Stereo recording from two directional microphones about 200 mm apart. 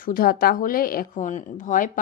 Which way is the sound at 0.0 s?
45° left (ahead or behind).